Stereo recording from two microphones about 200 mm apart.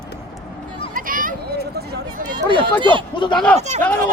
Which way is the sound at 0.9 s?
45° right (ahead or behind).